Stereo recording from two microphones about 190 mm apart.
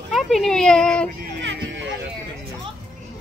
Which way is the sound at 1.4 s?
75° right (ahead or behind).